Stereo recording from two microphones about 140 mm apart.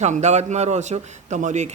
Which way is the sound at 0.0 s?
55° right (ahead or behind).